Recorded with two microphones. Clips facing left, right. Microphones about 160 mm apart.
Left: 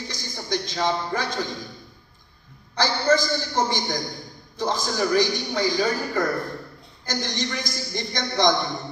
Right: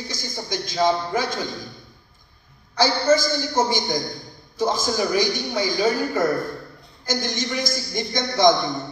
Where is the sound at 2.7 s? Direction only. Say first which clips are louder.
Right 3 dB; 5° right (ahead or behind).